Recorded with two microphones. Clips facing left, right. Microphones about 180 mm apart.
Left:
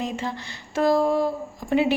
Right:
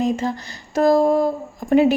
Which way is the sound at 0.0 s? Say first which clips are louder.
Right 8 dB; 45° right (ahead or behind).